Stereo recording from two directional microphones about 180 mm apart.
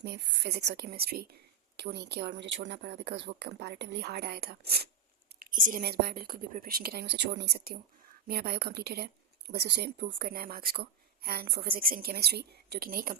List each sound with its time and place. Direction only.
0.0 s speech: 65° right (ahead or behind)
5.4 s speech: 50° right (ahead or behind)